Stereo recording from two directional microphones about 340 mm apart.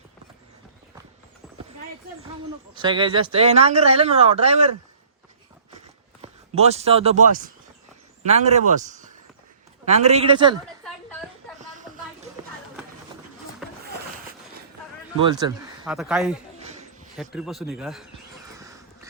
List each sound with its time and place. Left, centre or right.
2.7 s speech: centre
6.2 s a man's voice: centre
11.6 s a sound: right
13.6 s a sound: centre
15.2 s a man's voice: centre
18.5 s cat: centre